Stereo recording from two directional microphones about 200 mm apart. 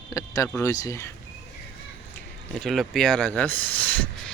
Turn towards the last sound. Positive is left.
turn(degrees=10)  # may be behind; listen again after turning